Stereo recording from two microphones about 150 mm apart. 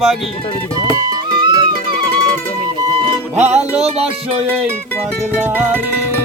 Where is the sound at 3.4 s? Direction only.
50° right (ahead or behind).